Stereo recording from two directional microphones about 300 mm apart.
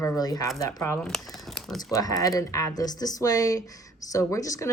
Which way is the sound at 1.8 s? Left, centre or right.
Centre.